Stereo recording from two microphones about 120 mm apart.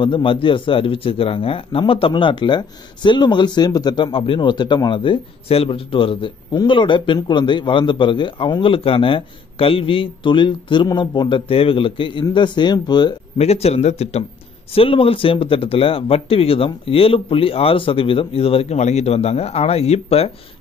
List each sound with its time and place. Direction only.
0.0 s a man's voice: 45° left (ahead or behind)
13.4 s speech: 60° left (ahead or behind)
14.7 s speech: 50° left (ahead or behind)